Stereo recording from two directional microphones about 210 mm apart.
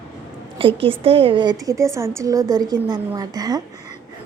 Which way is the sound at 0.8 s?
25° right (ahead or behind).